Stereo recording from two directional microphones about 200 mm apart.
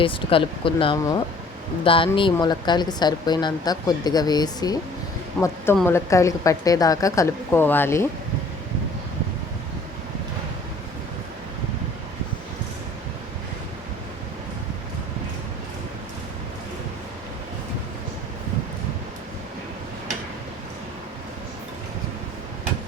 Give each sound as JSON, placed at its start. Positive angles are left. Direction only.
{"t": 0.0, "sound": "a woman's voice", "side_deg": 25}